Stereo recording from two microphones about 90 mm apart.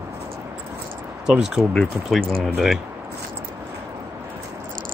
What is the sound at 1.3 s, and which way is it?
Speech, 5° right (ahead or behind).